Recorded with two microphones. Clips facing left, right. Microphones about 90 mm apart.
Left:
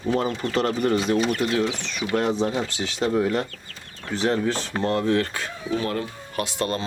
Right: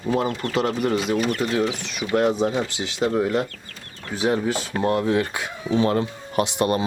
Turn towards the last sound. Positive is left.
turn(degrees=-15)  # may be behind; listen again after turning